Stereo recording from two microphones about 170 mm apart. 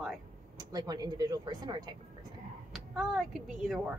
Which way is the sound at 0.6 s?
25° right (ahead or behind).